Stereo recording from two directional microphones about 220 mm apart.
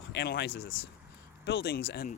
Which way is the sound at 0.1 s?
45° left (ahead or behind).